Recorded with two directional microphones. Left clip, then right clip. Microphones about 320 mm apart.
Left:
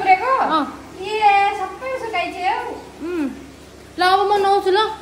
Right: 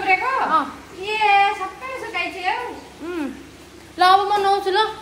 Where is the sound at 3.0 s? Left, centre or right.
Centre.